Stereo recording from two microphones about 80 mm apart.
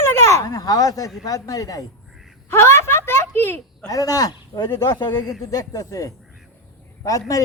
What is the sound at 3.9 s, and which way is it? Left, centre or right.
Speech, left.